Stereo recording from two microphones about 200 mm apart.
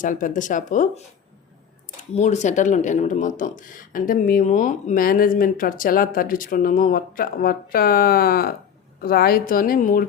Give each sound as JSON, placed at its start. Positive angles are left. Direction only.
{"t": 0.0, "sound": "speech", "side_deg": 40}
{"t": 2.1, "sound": "speech", "side_deg": 35}